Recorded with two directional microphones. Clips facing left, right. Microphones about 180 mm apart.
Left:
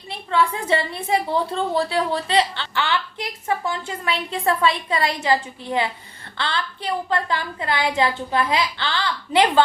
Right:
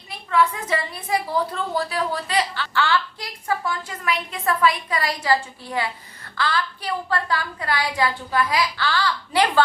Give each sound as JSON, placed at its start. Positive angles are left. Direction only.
{"t": 0.1, "sound": "a woman's voice", "side_deg": 30}